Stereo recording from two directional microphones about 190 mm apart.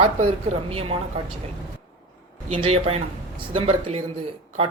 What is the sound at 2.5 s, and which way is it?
Speech, 30° right (ahead or behind).